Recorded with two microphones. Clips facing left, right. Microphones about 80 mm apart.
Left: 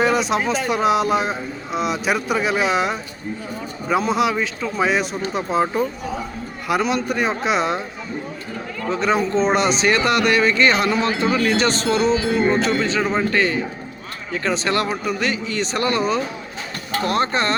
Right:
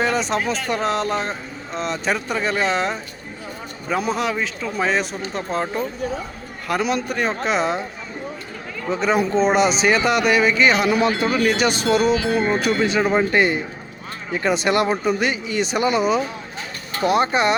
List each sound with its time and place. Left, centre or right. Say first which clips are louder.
0.0 s a man's voice: left 2 dB; centre
4.0 s a man's voice: left 2 dB; centre
8.9 s speech: even; centre
10.8 s speech: right 1 dB; centre